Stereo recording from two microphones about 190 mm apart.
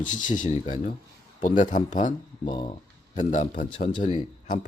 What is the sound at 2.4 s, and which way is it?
A man's voice, 30° left (ahead or behind).